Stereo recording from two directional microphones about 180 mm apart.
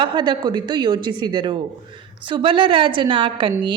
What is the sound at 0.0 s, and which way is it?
A woman's voice, 25° right (ahead or behind).